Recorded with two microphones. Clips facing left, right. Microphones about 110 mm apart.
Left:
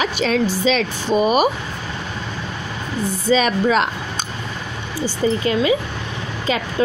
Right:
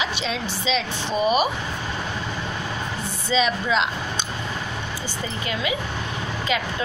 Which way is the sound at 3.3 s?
50° left (ahead or behind).